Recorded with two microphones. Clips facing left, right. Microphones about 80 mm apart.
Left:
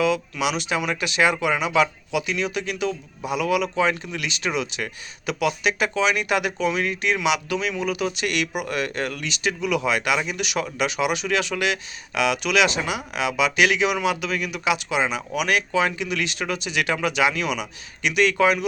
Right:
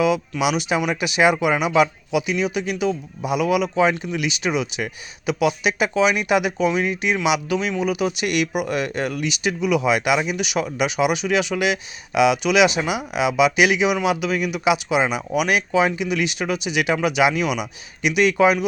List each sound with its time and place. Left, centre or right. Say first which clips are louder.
0.0 s speech: right 3 dB; centre